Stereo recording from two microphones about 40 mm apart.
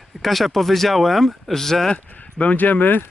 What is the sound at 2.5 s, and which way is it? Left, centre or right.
Speech, left.